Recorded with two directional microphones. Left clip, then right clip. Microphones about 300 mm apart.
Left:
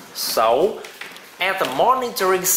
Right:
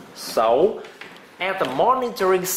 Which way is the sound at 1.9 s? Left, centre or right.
Centre.